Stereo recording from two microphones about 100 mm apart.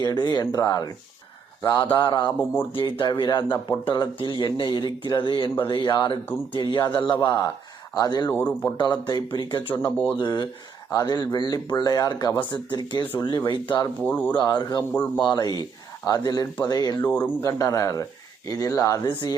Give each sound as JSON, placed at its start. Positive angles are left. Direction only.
{"t": 0.0, "sound": "speech", "side_deg": 40}
{"t": 1.8, "sound": "speech", "side_deg": 50}
{"t": 2.4, "sound": "speech", "side_deg": 15}
{"t": 2.7, "sound": "speech", "side_deg": 55}
{"t": 8.3, "sound": "speech", "side_deg": 20}
{"t": 8.8, "sound": "speech", "side_deg": 45}
{"t": 14.0, "sound": "speech", "side_deg": 15}
{"t": 14.3, "sound": "speech", "side_deg": 45}
{"t": 14.9, "sound": "speech", "side_deg": 15}
{"t": 15.3, "sound": "speech", "side_deg": 45}
{"t": 17.1, "sound": "speech", "side_deg": 15}
{"t": 17.4, "sound": "speech", "side_deg": 35}
{"t": 19.0, "sound": "speech", "side_deg": 50}